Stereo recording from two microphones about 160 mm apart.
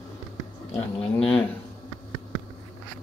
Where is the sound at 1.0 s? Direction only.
5° left (ahead or behind).